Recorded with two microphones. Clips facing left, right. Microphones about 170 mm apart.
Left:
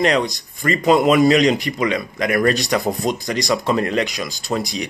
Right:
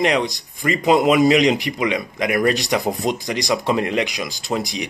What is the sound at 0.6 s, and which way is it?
A man's voice, 15° right (ahead or behind).